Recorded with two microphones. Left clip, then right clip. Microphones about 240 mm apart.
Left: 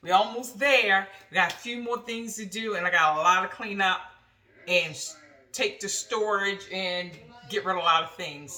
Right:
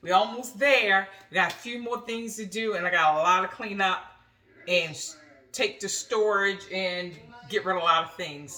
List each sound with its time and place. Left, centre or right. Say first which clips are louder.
0.0 s speech: even; centre